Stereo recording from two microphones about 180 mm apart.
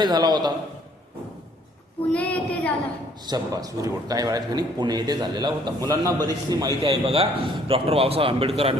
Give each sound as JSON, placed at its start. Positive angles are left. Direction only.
{"t": 0.0, "sound": "a man's voice", "side_deg": -20}
{"t": 2.1, "sound": "child singing", "side_deg": 10}
{"t": 3.2, "sound": "a man's voice", "side_deg": -20}